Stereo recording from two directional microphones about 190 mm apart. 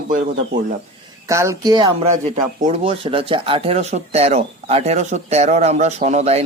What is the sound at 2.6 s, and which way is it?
Speech, 35° right (ahead or behind).